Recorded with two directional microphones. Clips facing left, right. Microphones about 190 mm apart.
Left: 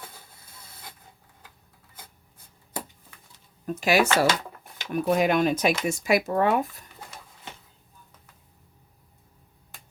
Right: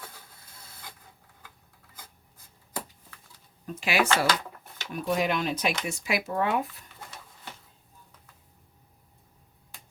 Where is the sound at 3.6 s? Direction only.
45° left (ahead or behind).